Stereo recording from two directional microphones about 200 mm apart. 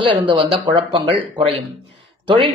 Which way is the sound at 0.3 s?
25° right (ahead or behind).